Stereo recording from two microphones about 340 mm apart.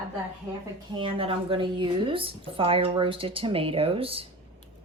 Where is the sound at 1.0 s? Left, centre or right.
Centre.